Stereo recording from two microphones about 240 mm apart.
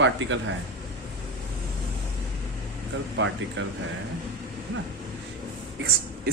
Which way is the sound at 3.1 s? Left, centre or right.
Right.